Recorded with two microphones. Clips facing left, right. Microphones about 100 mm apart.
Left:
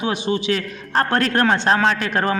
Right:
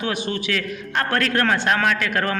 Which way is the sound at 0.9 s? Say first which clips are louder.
Left 3 dB; 30° left (ahead or behind).